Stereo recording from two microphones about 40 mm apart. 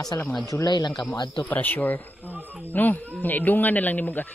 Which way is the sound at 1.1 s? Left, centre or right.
Left.